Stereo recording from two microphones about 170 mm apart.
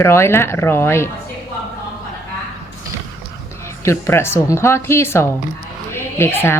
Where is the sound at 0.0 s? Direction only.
15° left (ahead or behind).